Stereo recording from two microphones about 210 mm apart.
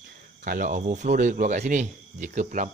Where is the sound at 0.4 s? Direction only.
40° right (ahead or behind).